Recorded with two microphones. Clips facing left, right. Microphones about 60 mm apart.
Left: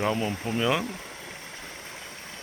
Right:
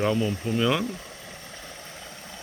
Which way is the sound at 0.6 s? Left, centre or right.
Centre.